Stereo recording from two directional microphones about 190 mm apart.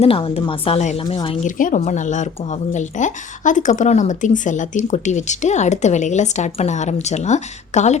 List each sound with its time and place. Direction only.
0.0 s a woman's voice: 30° left (ahead or behind)
1.5 s speech: 45° left (ahead or behind)